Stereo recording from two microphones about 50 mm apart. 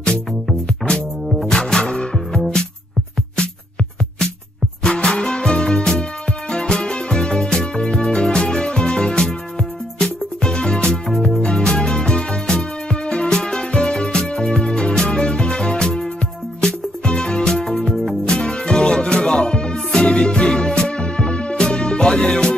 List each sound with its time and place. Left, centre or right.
0.8 s music: left
4.8 s music: centre